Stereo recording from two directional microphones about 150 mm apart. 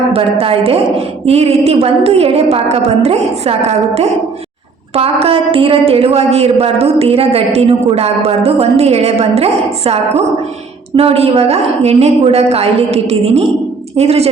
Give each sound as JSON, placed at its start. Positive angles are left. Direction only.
{"t": 0.1, "sound": "speech", "side_deg": -40}